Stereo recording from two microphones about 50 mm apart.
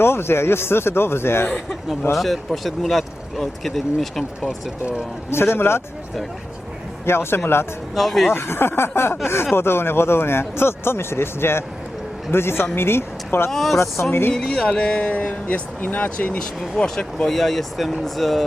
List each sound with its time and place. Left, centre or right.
0.0 s speech: left
2.1 s speech: centre
5.3 s speech: left
7.0 s speech: left
7.9 s speech: centre
8.3 s speech: left
13.5 s speech: centre
14.1 s speech: left
14.3 s speech: centre
16.7 s speech: centre